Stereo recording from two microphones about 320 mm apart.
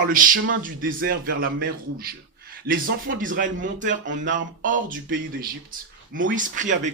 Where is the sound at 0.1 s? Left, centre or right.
Right.